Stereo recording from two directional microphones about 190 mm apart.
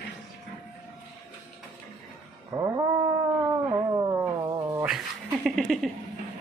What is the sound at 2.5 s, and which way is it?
Cat, 20° right (ahead or behind).